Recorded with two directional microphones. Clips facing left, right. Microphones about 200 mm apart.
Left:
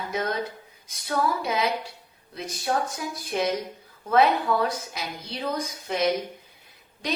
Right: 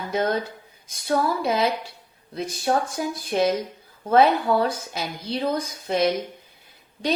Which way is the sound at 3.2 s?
30° right (ahead or behind).